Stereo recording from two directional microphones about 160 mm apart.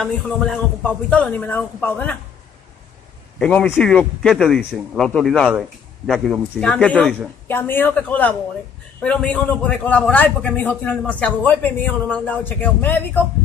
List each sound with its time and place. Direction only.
0.0 s a man's voice: 5° left (ahead or behind)
3.3 s a man's voice: 5° left (ahead or behind)